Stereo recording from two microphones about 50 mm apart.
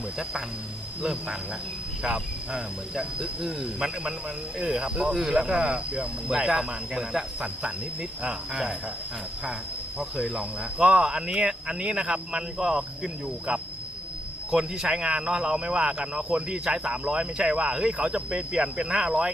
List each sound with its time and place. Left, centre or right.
2.6 s speech: centre
10.0 s speech: centre
14.5 s speech: centre